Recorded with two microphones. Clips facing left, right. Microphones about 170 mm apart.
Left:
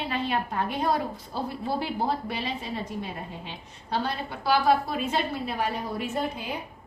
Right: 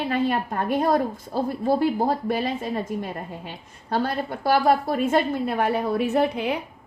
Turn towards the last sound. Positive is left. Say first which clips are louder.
# right 8 dB
turn(degrees=-75)  # may be behind; listen again after turning